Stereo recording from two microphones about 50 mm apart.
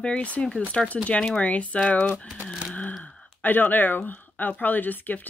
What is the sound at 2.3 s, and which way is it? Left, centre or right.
Speech, centre.